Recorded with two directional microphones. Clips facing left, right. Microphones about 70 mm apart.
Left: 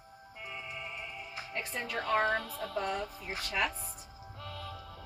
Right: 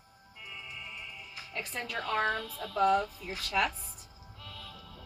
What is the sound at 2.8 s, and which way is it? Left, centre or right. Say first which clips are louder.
Speech: right 10 dB; right.